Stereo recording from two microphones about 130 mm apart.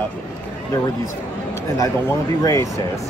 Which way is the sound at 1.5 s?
20° left (ahead or behind).